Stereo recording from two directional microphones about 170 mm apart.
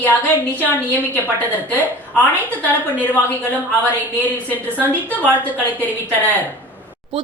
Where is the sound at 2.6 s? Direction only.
10° left (ahead or behind).